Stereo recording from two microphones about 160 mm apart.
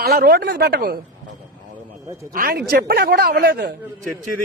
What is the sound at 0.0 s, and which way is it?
Speech, 80° right.